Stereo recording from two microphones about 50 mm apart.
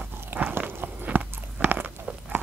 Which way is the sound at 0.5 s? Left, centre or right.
Right.